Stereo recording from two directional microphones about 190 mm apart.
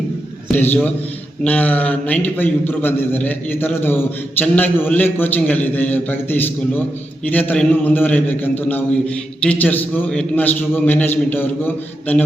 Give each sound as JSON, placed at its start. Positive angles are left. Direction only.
{"t": 0.5, "sound": "a man's voice", "side_deg": 10}